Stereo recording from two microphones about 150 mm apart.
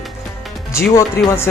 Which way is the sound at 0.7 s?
20° left (ahead or behind).